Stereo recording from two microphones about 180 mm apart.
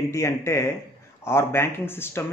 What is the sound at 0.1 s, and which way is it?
A man's voice, 15° left (ahead or behind).